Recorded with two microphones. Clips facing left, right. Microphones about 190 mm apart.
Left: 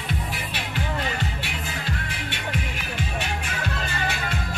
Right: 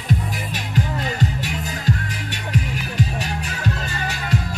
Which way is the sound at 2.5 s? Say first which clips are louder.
Right 6 dB; 40° right (ahead or behind).